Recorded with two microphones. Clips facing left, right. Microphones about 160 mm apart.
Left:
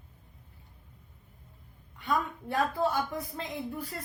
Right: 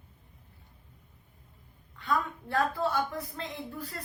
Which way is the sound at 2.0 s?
15° left (ahead or behind).